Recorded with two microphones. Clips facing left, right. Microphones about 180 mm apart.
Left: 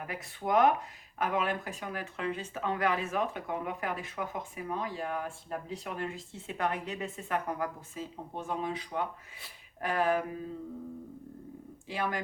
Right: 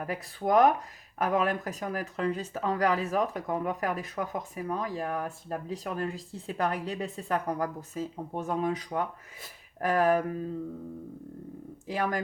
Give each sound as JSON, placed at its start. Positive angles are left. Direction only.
{"t": 0.0, "sound": "speech", "side_deg": -40}
{"t": 11.9, "sound": "speech", "side_deg": -40}